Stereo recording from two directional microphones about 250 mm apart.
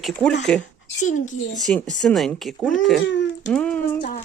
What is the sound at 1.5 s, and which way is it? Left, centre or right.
Speech, centre.